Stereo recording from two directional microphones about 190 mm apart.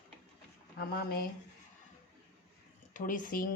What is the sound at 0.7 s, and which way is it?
Speech, 55° left (ahead or behind).